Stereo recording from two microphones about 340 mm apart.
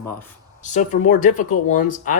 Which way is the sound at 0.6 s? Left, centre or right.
Left.